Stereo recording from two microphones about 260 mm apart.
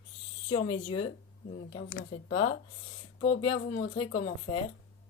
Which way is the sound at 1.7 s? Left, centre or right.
Left.